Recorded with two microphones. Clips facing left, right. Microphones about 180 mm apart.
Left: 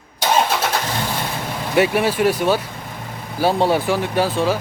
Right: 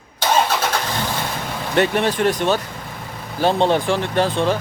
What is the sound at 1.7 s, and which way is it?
Speech, 5° left (ahead or behind).